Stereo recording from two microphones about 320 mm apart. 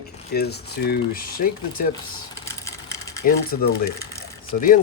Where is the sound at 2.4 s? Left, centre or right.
Centre.